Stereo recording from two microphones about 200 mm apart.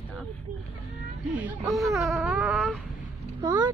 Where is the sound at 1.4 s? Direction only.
10° right (ahead or behind).